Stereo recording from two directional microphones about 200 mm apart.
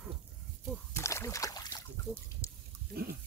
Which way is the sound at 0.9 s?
15° left (ahead or behind).